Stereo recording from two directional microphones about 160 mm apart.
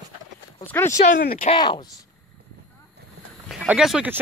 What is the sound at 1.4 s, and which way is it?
Speech, 30° left (ahead or behind).